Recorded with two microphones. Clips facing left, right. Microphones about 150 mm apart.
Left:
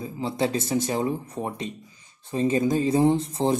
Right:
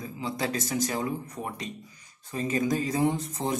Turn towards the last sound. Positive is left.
turn(degrees=30)  # may be behind; listen again after turning